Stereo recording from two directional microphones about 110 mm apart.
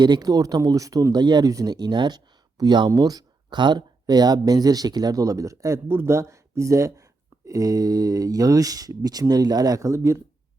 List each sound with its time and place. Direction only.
0.0 s speech: 40° right (ahead or behind)